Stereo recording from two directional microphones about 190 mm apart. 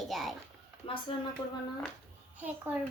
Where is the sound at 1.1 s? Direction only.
25° left (ahead or behind).